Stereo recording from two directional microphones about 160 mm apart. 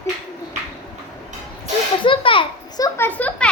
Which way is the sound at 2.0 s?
35° left (ahead or behind).